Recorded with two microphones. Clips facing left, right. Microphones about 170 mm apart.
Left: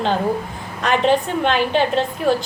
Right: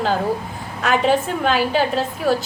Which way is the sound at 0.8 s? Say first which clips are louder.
Left 1 dB; 5° right (ahead or behind).